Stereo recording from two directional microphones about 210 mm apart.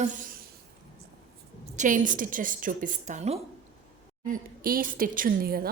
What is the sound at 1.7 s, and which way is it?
A woman's voice, 35° right (ahead or behind).